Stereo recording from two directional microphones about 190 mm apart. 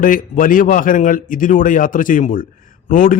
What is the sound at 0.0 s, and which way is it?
Speech, 45° left (ahead or behind).